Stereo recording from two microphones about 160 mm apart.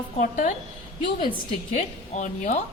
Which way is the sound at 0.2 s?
55° left (ahead or behind).